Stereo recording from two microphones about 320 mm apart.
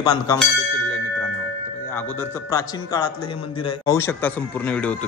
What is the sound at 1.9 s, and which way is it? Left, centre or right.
A man's voice, centre.